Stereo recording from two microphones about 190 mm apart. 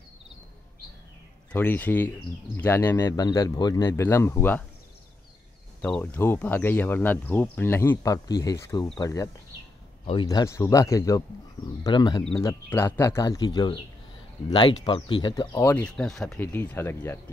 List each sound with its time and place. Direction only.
1.5 s speech: 10° left (ahead or behind)
5.8 s speech: 10° left (ahead or behind); by 12.4 s 25° left (ahead or behind)
12.4 s speech: 15° left (ahead or behind)
15.8 s speech: 5° left (ahead or behind)